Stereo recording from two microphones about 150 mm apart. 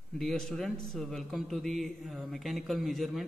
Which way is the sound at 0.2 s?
5° left (ahead or behind).